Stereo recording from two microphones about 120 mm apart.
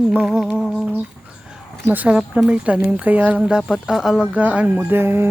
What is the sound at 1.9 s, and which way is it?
Speech, 10° right (ahead or behind).